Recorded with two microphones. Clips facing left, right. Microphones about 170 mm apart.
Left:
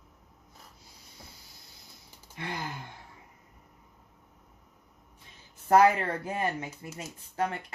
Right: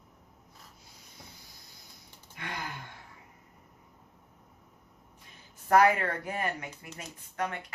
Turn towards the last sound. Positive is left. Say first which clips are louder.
# left 3 dB
turn(degrees=30)  # may be behind; listen again after turning